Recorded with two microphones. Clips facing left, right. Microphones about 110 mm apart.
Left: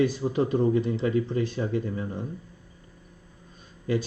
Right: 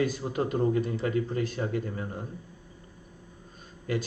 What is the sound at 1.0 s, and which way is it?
Speech, 45° right (ahead or behind).